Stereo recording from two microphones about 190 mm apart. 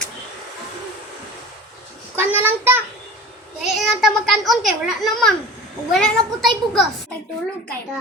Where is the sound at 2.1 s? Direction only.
10° right (ahead or behind).